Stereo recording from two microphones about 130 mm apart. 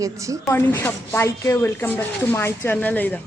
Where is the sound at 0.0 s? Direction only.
25° right (ahead or behind).